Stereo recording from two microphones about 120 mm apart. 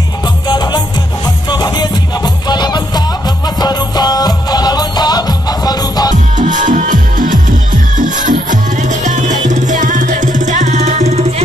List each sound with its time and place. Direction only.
0.5 s music: 35° left (ahead or behind)
6.3 s music: 90° right; by 11.4 s 60° right (ahead or behind)